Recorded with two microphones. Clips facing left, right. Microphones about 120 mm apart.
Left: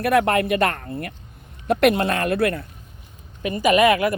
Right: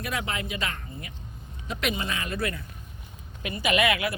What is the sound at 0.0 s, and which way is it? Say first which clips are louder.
Speech: left 14 dB; 60° left (ahead or behind).